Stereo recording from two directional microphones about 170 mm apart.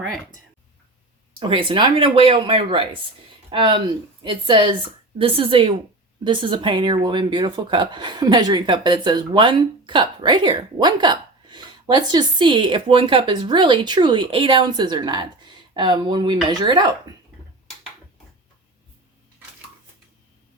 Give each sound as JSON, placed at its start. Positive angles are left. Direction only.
{"t": 1.3, "sound": "speech", "side_deg": -30}